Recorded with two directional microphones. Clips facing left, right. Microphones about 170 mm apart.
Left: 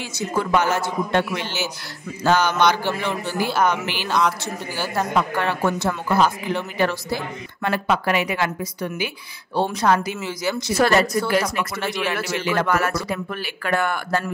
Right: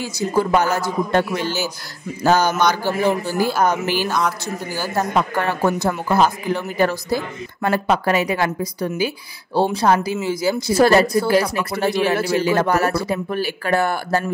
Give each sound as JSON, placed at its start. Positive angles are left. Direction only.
{"t": 0.0, "sound": "speech", "side_deg": -35}